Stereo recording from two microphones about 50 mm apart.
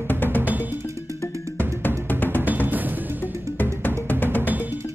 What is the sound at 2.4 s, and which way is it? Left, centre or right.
Music, right.